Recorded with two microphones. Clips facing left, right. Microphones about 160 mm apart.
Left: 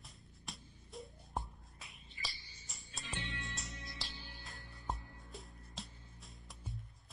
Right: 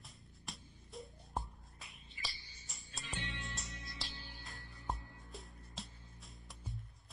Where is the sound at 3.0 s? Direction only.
20° left (ahead or behind).